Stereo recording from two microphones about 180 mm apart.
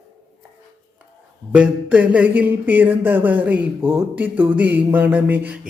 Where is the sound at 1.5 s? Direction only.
5° right (ahead or behind).